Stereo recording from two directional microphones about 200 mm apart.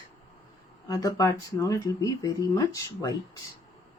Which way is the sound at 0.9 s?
20° left (ahead or behind).